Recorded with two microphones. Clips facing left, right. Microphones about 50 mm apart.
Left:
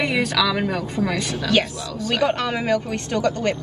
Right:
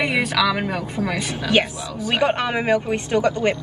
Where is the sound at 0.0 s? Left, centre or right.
Centre.